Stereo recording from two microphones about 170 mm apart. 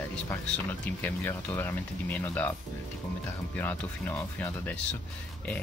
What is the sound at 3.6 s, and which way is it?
Speech, 10° left (ahead or behind).